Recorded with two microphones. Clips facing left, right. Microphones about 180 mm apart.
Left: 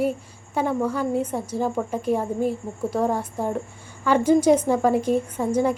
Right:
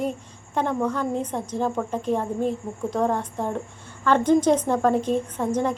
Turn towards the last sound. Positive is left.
turn(degrees=10)  # may be behind; listen again after turning